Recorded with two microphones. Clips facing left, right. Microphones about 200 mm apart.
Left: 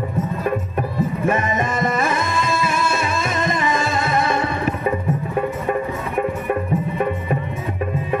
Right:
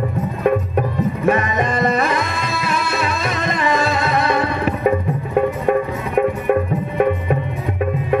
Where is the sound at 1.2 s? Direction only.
60° right (ahead or behind).